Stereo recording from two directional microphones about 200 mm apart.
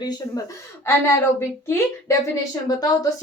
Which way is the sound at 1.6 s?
15° left (ahead or behind).